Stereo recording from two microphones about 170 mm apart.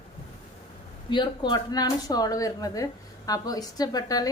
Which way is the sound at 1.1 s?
25° left (ahead or behind).